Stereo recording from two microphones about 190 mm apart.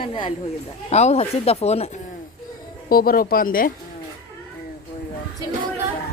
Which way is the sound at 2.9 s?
50° left (ahead or behind).